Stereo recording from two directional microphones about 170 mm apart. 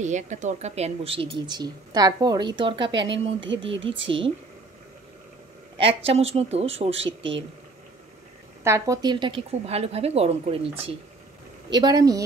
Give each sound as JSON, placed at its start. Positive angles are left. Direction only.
{"t": 0.0, "sound": "speech", "side_deg": -45}
{"t": 3.4, "sound": "speech", "side_deg": -90}
{"t": 5.8, "sound": "speech", "side_deg": -35}
{"t": 7.1, "sound": "speech", "side_deg": -90}
{"t": 8.6, "sound": "speech", "side_deg": -20}
{"t": 11.7, "sound": "speech", "side_deg": -25}